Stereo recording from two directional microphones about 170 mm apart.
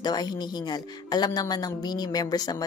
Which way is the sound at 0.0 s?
25° left (ahead or behind).